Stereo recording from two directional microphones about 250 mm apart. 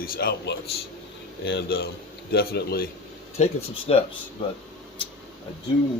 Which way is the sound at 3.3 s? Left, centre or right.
Left.